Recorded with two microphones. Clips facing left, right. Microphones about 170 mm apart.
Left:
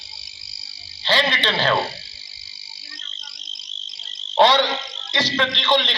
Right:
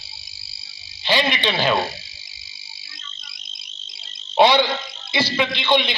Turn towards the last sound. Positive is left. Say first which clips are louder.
# right 1 dB
turn(degrees=-10)  # may be behind; listen again after turning